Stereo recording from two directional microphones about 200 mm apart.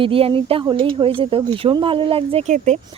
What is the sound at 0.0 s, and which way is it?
Speech, 25° right (ahead or behind).